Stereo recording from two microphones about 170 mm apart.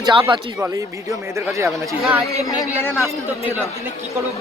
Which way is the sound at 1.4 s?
15° right (ahead or behind).